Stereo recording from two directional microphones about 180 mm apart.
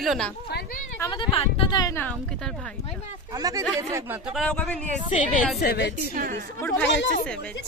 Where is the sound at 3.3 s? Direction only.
20° right (ahead or behind).